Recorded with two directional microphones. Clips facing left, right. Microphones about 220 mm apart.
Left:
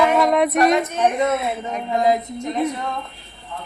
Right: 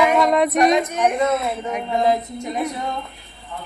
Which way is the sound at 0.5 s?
20° right (ahead or behind).